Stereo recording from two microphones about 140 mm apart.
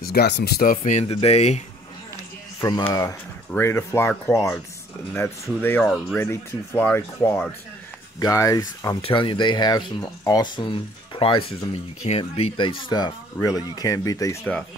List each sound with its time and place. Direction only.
0.0 s speech: 90° left; by 1.0 s 75° left (ahead or behind)
1.0 s speech: 45° left (ahead or behind)
2.9 s speech: 25° left (ahead or behind)
9.0 s speech: 35° left (ahead or behind)